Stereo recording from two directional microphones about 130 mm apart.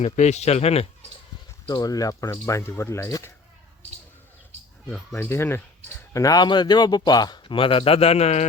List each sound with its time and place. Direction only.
0.0 s speech: 60° left (ahead or behind)
1.6 s speech: 30° left (ahead or behind)
5.1 s speech: 20° left (ahead or behind); by 8.4 s 55° left (ahead or behind)